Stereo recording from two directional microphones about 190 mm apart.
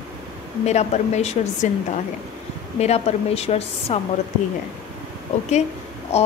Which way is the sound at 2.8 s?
35° left (ahead or behind).